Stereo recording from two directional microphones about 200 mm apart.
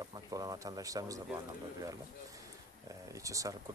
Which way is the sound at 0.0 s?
20° right (ahead or behind).